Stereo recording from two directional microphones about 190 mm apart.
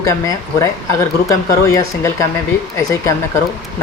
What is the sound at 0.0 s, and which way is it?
Speech, 15° left (ahead or behind).